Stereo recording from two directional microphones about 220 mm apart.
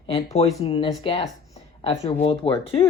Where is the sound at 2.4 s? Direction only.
25° left (ahead or behind).